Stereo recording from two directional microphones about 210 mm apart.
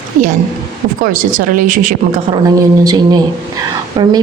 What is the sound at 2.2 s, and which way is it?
A woman's voice, 20° right (ahead or behind).